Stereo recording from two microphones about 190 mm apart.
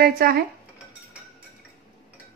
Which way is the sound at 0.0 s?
50° right (ahead or behind).